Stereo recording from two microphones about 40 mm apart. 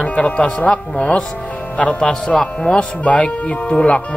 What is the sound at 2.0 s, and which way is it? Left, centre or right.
Speech, left.